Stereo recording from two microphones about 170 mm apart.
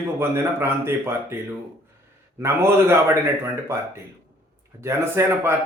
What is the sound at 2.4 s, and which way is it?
Speech, 15° right (ahead or behind).